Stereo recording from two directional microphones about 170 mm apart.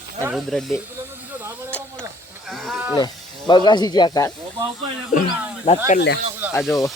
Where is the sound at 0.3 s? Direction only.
Centre (ahead or behind).